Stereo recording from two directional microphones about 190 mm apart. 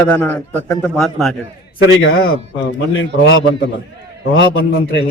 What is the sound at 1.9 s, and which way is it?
Speech, 90° left.